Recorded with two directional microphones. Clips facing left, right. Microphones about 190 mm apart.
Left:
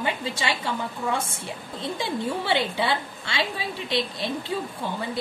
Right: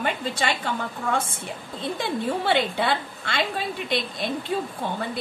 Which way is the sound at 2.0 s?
55° right (ahead or behind).